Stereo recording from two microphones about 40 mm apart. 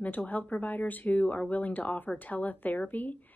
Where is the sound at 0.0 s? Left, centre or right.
Left.